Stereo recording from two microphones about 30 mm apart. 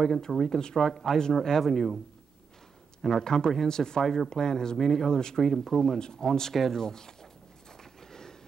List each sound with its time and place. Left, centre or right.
0.3 s speech: centre
1.6 s speech: centre
3.0 s speech: centre
3.3 s speech: centre
4.0 s speech: centre
4.3 s speech: centre
5.9 s speech: left
6.2 s speech: centre
8.1 s a sound: centre